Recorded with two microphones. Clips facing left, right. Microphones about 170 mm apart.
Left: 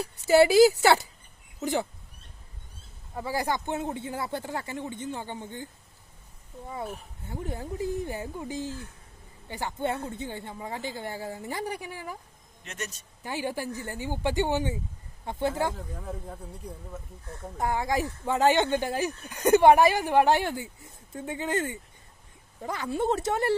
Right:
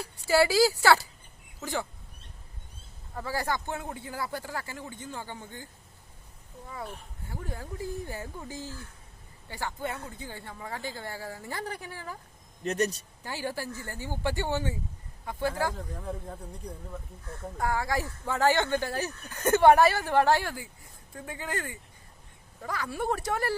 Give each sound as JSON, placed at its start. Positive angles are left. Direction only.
{"t": 0.0, "sound": "speech", "side_deg": 20}
{"t": 3.2, "sound": "speech", "side_deg": 15}
{"t": 7.3, "sound": "speech", "side_deg": 20}
{"t": 12.6, "sound": "a man's voice", "side_deg": -35}
{"t": 13.2, "sound": "speech", "side_deg": 15}
{"t": 15.7, "sound": "speech", "side_deg": 0}
{"t": 17.6, "sound": "speech", "side_deg": 20}